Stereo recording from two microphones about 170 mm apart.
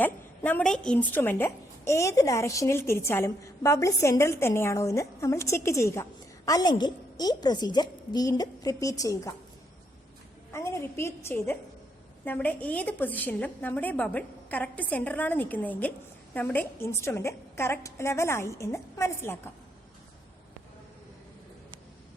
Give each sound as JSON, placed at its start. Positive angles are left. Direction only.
{"t": 0.0, "sound": "a woman's voice", "side_deg": 10}
{"t": 10.5, "sound": "a woman's voice", "side_deg": 15}